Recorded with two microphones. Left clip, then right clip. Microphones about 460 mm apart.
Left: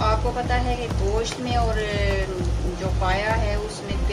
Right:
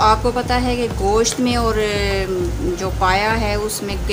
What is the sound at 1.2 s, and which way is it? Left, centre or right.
Speech, left.